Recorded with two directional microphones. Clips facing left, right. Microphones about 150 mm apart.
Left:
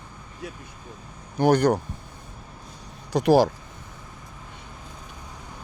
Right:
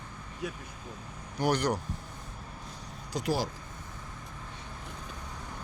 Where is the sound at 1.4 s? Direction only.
50° left (ahead or behind).